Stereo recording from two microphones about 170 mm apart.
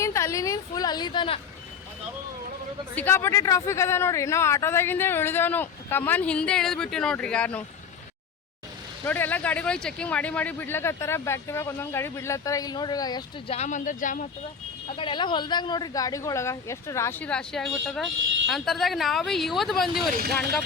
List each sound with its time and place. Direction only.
0.0 s a sound: 15° left (ahead or behind)
2.9 s speech: 10° left (ahead or behind)
9.0 s speech: 10° left (ahead or behind)
13.5 s speech: 45° left (ahead or behind)
14.9 s speech: 30° left (ahead or behind); by 20.1 s centre (ahead or behind)